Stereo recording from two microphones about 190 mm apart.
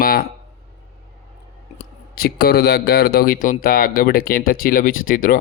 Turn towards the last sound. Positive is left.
turn(degrees=45)  # may be behind; listen again after turning